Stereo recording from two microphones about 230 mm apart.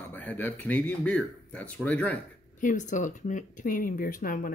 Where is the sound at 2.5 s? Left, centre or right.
Left.